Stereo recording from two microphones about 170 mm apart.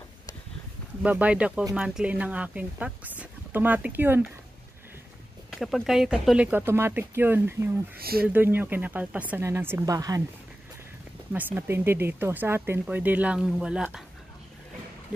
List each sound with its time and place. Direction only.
1.0 s speech: 10° right (ahead or behind)
5.5 s speech: centre (ahead or behind)
8.0 s speech: 65° right (ahead or behind)
8.3 s speech: 10° right (ahead or behind)
11.3 s speech: 10° right (ahead or behind)